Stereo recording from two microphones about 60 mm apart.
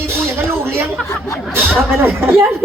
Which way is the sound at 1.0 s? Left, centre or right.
Left.